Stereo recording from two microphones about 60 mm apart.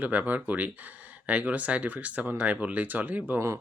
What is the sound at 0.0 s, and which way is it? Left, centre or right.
Speech, right.